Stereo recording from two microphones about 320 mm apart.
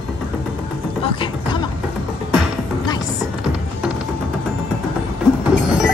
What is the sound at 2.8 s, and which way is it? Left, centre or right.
Chopping, centre.